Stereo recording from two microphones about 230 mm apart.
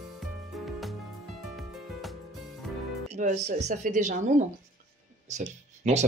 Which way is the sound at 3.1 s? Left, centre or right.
Right.